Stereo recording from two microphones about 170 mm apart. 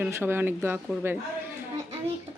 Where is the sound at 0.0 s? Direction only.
15° right (ahead or behind).